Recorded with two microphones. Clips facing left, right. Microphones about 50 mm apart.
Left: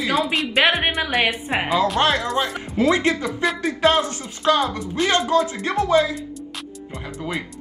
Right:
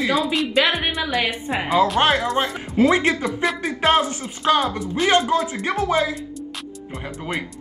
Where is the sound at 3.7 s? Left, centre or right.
Right.